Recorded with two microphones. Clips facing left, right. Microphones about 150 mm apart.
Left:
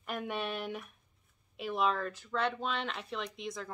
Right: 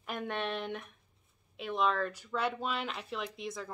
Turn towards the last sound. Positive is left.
turn(degrees=0)  # may be behind; listen again after turning